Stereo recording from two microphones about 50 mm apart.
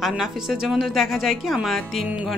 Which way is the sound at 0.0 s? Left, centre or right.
Centre.